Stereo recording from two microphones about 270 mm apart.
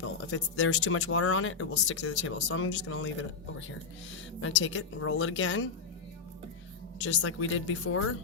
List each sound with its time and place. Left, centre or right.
0.0 s speech: left
4.4 s speech: left
7.0 s speech: left